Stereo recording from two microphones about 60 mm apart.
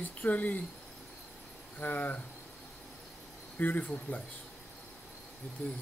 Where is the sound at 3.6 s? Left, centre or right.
Left.